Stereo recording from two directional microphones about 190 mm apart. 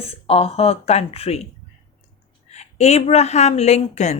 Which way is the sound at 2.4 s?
35° left (ahead or behind).